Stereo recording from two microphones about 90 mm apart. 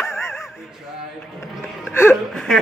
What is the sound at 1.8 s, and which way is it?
Music, 25° left (ahead or behind).